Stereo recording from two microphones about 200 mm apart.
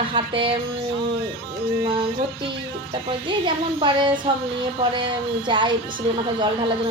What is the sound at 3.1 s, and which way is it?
A woman's voice, 25° right (ahead or behind).